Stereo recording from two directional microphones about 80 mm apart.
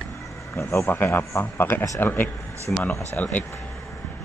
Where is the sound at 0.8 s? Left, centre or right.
Left.